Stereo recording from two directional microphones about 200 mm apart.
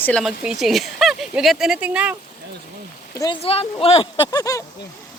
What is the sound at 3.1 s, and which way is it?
Speech, 20° left (ahead or behind).